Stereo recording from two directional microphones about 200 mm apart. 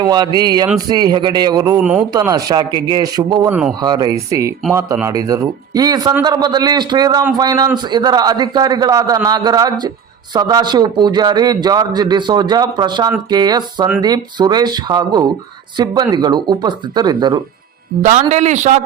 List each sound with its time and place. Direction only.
0.0 s a man's voice: 20° right (ahead or behind)
1.8 s a man's voice: 5° right (ahead or behind)
2.1 s a man's voice: 20° right (ahead or behind)
3.5 s a man's voice: 5° right (ahead or behind)
3.8 s a man's voice: 20° right (ahead or behind)
18.0 s a man's voice: 35° right (ahead or behind)